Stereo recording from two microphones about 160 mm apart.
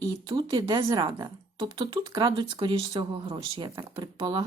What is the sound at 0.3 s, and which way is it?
Speech, 30° right (ahead or behind).